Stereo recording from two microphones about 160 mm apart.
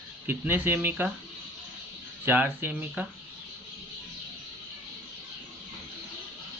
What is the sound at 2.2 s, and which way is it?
Speech, 10° right (ahead or behind).